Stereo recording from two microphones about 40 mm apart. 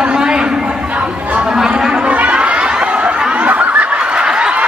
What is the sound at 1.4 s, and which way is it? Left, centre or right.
Livestock, centre.